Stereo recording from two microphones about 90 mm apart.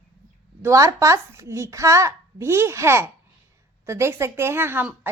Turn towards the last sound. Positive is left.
turn(degrees=-25)  # may be behind; listen again after turning